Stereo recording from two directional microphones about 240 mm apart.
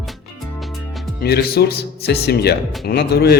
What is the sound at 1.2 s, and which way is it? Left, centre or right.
Speech, left.